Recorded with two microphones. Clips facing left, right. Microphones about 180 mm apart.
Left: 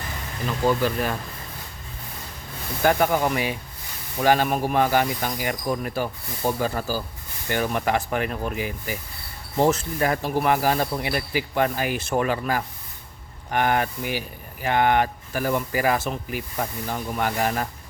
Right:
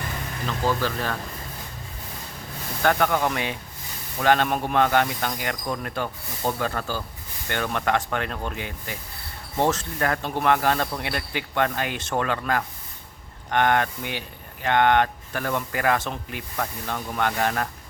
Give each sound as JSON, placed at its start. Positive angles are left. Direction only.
{"t": 0.7, "sound": "speech", "side_deg": 20}
{"t": 2.8, "sound": "speech", "side_deg": 10}